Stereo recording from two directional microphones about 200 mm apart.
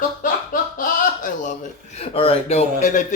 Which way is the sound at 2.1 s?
30° left (ahead or behind).